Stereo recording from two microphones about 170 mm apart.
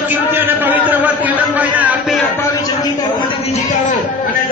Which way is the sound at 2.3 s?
20° left (ahead or behind).